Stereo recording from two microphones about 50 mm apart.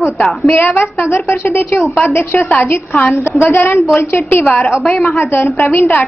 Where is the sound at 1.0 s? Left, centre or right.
Left.